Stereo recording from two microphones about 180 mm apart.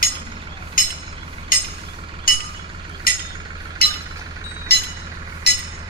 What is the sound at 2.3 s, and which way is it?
Chink, 50° left (ahead or behind).